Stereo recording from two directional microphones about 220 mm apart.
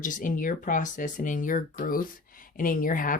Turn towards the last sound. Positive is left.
turn(degrees=40)  # may be behind; listen again after turning